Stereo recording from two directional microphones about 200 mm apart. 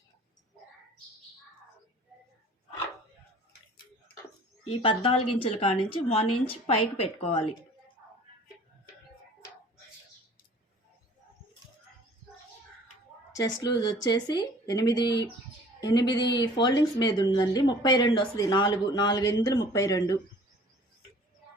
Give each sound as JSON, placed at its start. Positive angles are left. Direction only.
{"t": 4.6, "sound": "speech", "side_deg": 25}
{"t": 13.3, "sound": "speech", "side_deg": 20}